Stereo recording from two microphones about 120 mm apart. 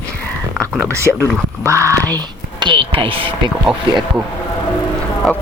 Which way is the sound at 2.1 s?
40° right (ahead or behind).